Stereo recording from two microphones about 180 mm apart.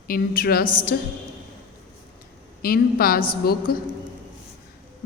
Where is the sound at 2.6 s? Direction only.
55° left (ahead or behind).